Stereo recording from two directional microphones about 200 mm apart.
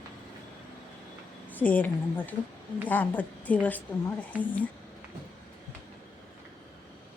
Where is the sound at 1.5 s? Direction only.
10° left (ahead or behind).